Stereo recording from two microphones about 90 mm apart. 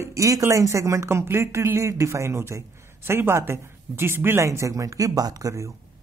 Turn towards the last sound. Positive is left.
turn(degrees=-35)  # may be behind; listen again after turning